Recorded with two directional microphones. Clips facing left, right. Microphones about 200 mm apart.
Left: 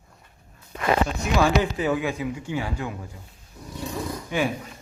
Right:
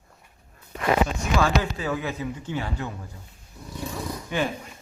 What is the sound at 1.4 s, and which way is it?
Speech, 15° left (ahead or behind).